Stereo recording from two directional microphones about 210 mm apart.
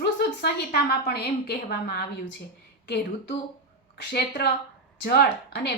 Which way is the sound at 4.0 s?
50° left (ahead or behind).